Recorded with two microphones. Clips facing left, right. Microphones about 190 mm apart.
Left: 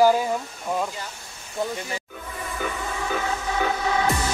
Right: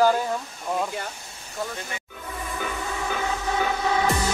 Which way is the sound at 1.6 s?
20° left (ahead or behind).